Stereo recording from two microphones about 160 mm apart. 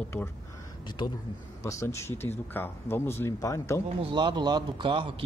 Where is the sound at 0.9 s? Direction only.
30° left (ahead or behind).